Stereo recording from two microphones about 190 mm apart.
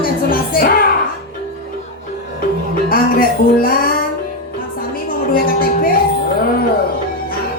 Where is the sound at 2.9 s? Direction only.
50° left (ahead or behind).